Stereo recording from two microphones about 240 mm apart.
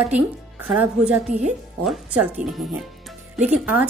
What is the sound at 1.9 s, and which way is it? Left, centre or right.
A woman's voice, centre.